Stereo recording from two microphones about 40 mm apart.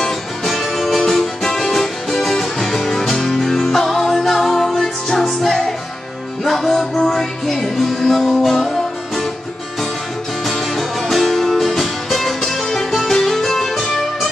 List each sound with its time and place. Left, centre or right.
0.5 s music: centre
10.4 s music: centre